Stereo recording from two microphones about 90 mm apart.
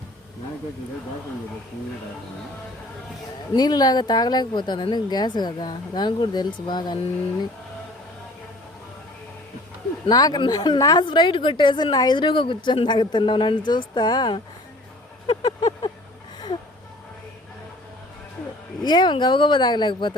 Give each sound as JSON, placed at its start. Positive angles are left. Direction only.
{"t": 3.5, "sound": "speech", "side_deg": 50}
{"t": 10.1, "sound": "speech", "side_deg": 45}
{"t": 11.0, "sound": "a woman's voice", "side_deg": 60}
{"t": 15.3, "sound": "a sound", "side_deg": 65}
{"t": 18.8, "sound": "a woman's voice", "side_deg": 55}